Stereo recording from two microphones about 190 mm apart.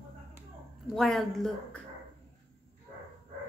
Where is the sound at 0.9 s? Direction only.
Centre (ahead or behind).